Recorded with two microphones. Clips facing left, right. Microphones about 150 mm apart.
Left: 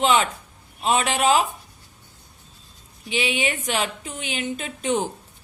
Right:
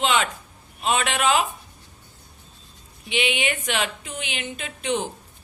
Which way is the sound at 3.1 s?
35° left (ahead or behind).